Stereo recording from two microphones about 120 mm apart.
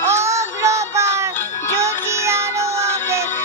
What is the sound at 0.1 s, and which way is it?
Child singing, 25° right (ahead or behind).